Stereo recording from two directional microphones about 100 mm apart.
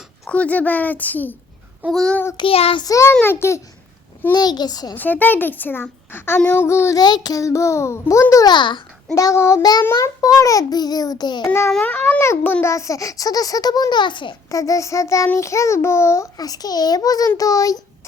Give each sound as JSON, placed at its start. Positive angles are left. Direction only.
{"t": 0.3, "sound": "a woman's voice", "side_deg": 15}
{"t": 1.9, "sound": "child singing", "side_deg": 5}
{"t": 2.4, "sound": "child singing", "side_deg": 70}
{"t": 2.8, "sound": "a child's voice", "side_deg": 30}
{"t": 4.3, "sound": "a child's voice", "side_deg": 40}
{"t": 4.9, "sound": "a child's voice", "side_deg": 15}
{"t": 7.0, "sound": "a child's voice", "side_deg": 40}
{"t": 8.4, "sound": "a child's voice", "side_deg": 50}
{"t": 9.1, "sound": "a child's voice", "side_deg": 30}
{"t": 9.6, "sound": "a child's voice", "side_deg": 40}
{"t": 9.8, "sound": "a child's voice", "side_deg": 30}
{"t": 11.8, "sound": "a woman's voice", "side_deg": 15}
{"t": 12.6, "sound": "a child's voice", "side_deg": 30}
{"t": 14.5, "sound": "a child's voice", "side_deg": 35}